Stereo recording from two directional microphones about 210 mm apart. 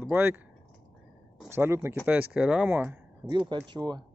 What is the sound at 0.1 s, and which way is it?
Speech, 10° right (ahead or behind).